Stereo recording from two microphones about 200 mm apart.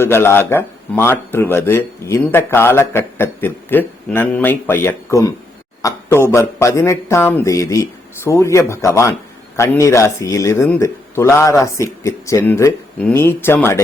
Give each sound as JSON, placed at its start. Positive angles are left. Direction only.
{"t": 0.0, "sound": "speech", "side_deg": 10}